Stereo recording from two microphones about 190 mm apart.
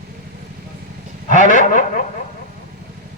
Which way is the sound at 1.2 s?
40° left (ahead or behind).